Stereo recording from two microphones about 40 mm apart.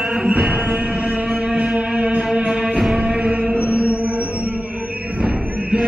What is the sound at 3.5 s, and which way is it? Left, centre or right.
Mantra, right.